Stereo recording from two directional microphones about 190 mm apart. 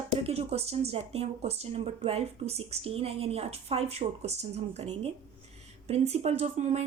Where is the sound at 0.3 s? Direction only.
35° right (ahead or behind).